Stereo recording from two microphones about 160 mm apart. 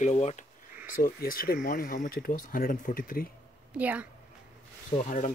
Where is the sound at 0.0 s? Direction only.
45° left (ahead or behind).